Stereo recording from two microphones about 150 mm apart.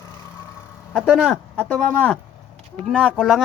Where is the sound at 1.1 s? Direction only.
5° right (ahead or behind).